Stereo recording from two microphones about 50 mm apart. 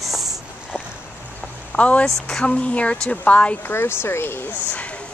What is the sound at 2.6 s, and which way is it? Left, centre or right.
Speech, left.